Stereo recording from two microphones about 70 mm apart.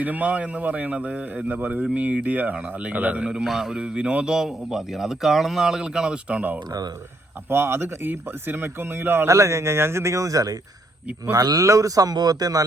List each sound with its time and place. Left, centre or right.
0.0 s speech: right
3.2 s a man's voice: centre
7.5 s a man's voice: right
9.3 s speech: right
11.6 s a man's voice: right